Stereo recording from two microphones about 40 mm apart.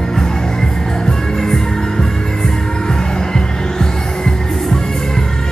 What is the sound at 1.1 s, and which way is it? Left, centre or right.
Music, centre.